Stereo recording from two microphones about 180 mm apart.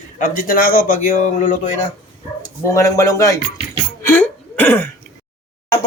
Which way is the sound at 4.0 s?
10° left (ahead or behind).